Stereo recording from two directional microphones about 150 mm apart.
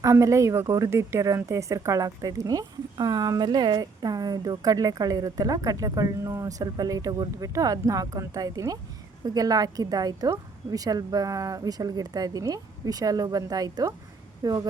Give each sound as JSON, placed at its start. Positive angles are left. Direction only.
{"t": 0.0, "sound": "speech", "side_deg": -20}